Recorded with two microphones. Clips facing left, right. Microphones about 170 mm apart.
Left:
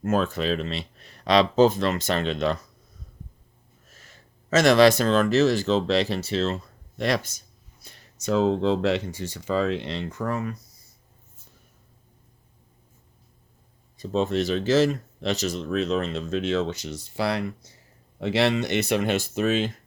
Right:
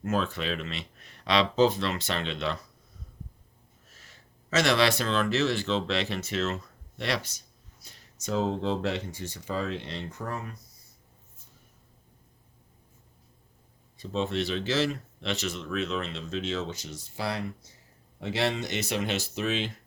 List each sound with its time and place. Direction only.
0.0 s speech: 45° left (ahead or behind)
3.9 s speech: 45° left (ahead or behind); by 6.6 s 30° left (ahead or behind)
7.0 s speech: 45° left (ahead or behind); by 10.5 s 90° left
13.9 s speech: 45° left (ahead or behind)